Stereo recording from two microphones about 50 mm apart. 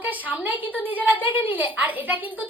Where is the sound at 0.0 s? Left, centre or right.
Right.